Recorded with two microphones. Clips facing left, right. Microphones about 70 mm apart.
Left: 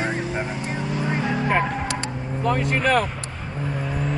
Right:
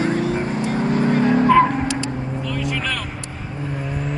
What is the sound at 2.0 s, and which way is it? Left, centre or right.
Vehicle, left.